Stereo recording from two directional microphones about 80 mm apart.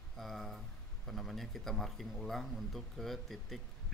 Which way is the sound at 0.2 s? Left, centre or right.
Centre.